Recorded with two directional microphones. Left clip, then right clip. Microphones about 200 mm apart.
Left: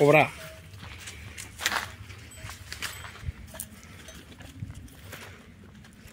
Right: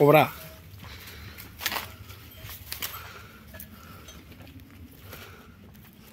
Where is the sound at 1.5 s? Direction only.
5° right (ahead or behind).